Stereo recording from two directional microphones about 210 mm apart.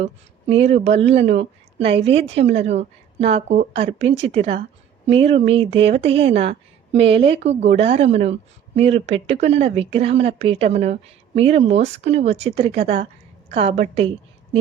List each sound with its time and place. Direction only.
0.0 s speech: 30° right (ahead or behind)